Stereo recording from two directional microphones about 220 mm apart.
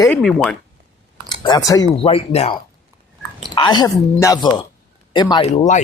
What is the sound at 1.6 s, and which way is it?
Speech, 15° left (ahead or behind).